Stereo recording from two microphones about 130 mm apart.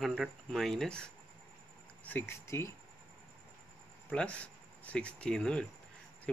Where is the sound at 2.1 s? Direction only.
15° left (ahead or behind).